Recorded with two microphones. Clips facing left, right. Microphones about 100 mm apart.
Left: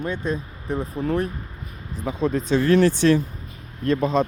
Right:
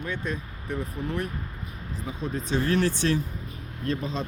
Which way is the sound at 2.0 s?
90° left.